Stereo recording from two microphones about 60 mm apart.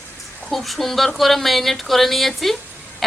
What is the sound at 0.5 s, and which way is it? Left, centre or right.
A woman's voice, centre.